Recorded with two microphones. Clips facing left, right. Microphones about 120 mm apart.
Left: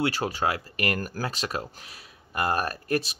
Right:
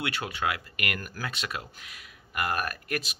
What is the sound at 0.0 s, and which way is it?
Speech, 35° left (ahead or behind).